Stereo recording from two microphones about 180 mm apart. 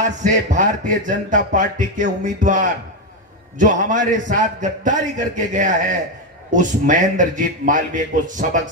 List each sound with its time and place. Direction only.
0.0 s speech: 45° right (ahead or behind)